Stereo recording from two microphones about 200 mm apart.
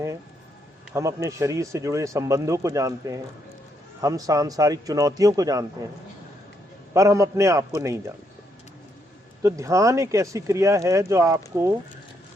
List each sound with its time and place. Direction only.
0.9 s speech: 15° right (ahead or behind)
6.9 s speech: 15° right (ahead or behind)
9.4 s speech: 15° right (ahead or behind)